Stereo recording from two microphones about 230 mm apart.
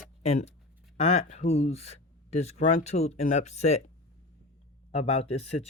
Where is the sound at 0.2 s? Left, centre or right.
Left.